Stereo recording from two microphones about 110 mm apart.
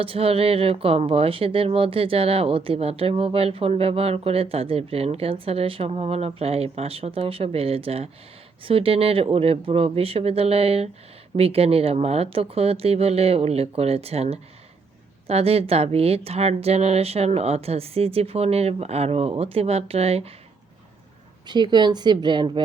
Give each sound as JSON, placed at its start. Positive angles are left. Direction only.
{"t": 0.0, "sound": "a woman's voice", "side_deg": -60}
{"t": 21.4, "sound": "a woman's voice", "side_deg": -40}